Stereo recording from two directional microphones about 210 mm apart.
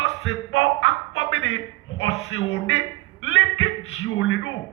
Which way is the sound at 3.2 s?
65° left (ahead or behind).